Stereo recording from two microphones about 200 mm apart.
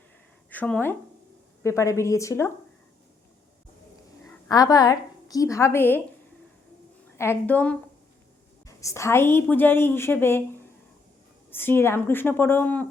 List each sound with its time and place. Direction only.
0.5 s a woman's voice: 10° left (ahead or behind)
4.4 s speech: 20° left (ahead or behind)
7.2 s a woman's voice: 10° left (ahead or behind)
11.5 s a woman's voice: 10° left (ahead or behind)